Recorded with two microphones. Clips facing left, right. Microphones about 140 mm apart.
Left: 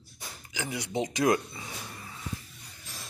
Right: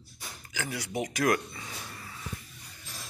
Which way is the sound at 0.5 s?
20° left (ahead or behind).